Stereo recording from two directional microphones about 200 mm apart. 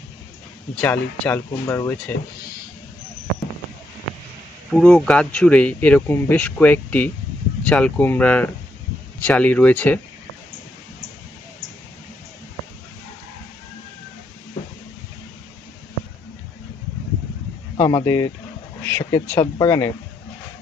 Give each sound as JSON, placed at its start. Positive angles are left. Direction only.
{"t": 0.8, "sound": "speech", "side_deg": 10}
{"t": 4.7, "sound": "speech", "side_deg": 5}
{"t": 17.7, "sound": "speech", "side_deg": 20}